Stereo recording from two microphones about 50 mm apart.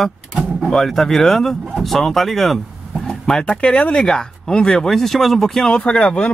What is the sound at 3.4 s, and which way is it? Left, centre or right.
Speech, left.